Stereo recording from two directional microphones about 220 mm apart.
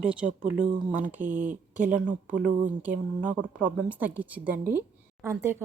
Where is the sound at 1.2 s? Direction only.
35° right (ahead or behind).